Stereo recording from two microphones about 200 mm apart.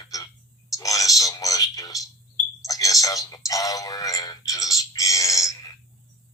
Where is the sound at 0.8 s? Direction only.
15° left (ahead or behind).